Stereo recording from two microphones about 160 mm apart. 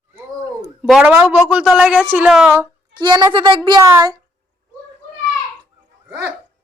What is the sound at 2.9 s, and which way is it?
Speech, 25° right (ahead or behind).